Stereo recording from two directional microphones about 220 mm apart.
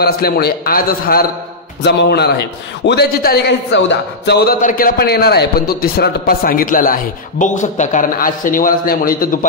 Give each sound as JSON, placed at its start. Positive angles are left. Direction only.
{"t": 0.0, "sound": "a man's voice", "side_deg": 45}